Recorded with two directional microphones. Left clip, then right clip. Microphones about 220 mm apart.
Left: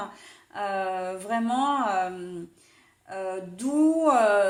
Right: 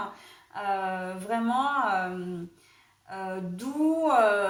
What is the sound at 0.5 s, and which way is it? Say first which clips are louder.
Speech: left 1 dB; 45° left (ahead or behind).